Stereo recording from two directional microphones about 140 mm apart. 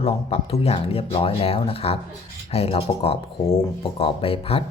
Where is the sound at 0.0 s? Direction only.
45° left (ahead or behind).